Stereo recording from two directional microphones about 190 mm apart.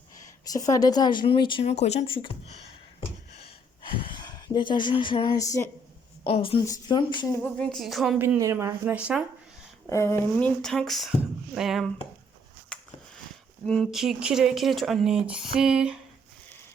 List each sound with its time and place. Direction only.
0.2 s speech: 20° left (ahead or behind)
3.3 s a sound: 30° left (ahead or behind)
6.2 s speech: 30° left (ahead or behind)
7.4 s speech: 5° left (ahead or behind)
8.2 s speech: 15° right (ahead or behind)
9.9 s speech: 15° left (ahead or behind); by 11.9 s centre (ahead or behind)
12.7 s a sound: 5° left (ahead or behind)
13.7 s speech: centre (ahead or behind)